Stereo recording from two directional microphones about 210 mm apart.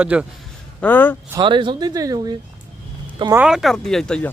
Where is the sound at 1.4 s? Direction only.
25° right (ahead or behind).